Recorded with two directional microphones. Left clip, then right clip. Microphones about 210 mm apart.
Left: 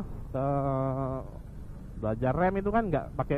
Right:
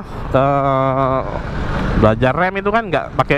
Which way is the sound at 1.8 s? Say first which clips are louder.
Right 19 dB; 20° right (ahead or behind).